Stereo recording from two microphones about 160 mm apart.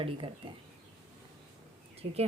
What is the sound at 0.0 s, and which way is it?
Speech, 30° right (ahead or behind).